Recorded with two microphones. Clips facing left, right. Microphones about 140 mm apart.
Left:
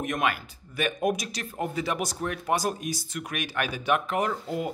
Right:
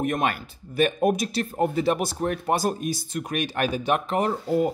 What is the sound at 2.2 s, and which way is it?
Speech, 45° right (ahead or behind).